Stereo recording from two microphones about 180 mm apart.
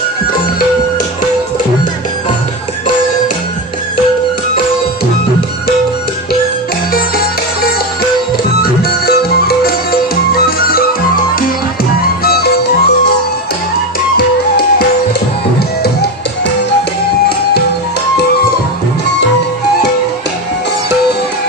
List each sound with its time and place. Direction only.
9.0 s music: 60° left (ahead or behind)
12.2 s music: 60° left (ahead or behind)
14.2 s music: 60° left (ahead or behind)